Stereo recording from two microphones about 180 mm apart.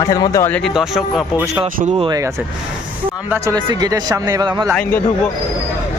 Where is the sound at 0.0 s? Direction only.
20° left (ahead or behind).